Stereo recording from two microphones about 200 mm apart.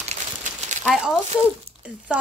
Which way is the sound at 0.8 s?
Centre (ahead or behind).